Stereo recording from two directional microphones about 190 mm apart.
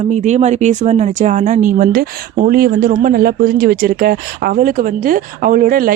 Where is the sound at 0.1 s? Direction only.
35° right (ahead or behind).